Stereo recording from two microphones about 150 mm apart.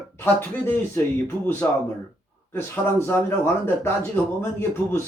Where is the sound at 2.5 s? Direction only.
15° left (ahead or behind).